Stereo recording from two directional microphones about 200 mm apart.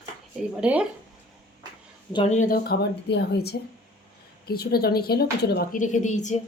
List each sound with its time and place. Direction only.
0.6 s speech: 5° right (ahead or behind)
2.3 s speech: 40° left (ahead or behind)
5.8 s a woman's voice: 40° left (ahead or behind)